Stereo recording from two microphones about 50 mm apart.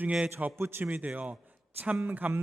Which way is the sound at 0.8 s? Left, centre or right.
Right.